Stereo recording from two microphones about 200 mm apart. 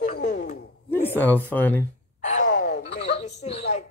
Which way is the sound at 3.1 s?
35° left (ahead or behind).